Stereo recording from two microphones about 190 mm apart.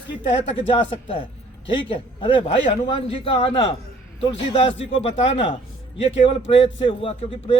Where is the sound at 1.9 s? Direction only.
30° left (ahead or behind).